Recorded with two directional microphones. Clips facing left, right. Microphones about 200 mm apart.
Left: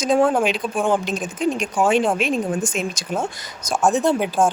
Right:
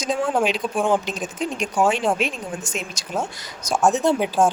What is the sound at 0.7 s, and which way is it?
Speech, centre (ahead or behind).